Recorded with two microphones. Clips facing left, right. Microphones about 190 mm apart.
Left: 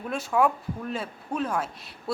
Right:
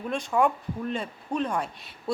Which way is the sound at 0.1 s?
5° left (ahead or behind).